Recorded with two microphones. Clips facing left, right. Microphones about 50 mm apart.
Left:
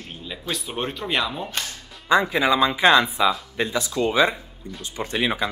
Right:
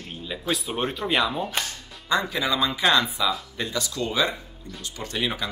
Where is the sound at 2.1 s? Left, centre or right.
Left.